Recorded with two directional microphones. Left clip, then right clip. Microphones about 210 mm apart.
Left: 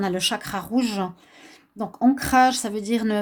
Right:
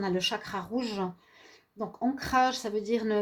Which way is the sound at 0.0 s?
55° left (ahead or behind).